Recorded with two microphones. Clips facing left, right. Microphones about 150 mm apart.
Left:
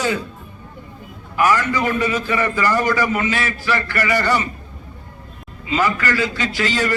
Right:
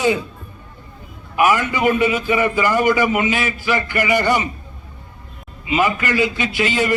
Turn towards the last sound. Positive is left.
turn(degrees=-15)  # may be behind; listen again after turning